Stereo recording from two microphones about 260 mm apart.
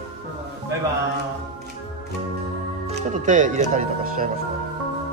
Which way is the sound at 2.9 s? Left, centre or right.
Right.